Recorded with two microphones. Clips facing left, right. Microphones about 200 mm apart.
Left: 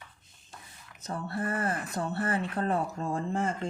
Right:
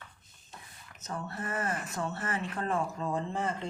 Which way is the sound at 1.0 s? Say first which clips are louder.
Left 5 dB; 35° left (ahead or behind).